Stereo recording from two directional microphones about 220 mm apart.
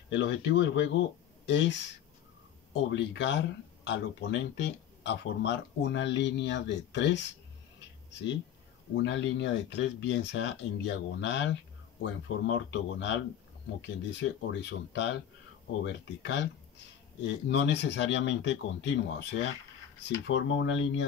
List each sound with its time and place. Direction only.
0.1 s speech: 55° left (ahead or behind)